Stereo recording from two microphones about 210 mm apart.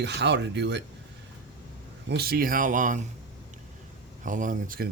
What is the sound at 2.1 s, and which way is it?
Speech, 50° right (ahead or behind).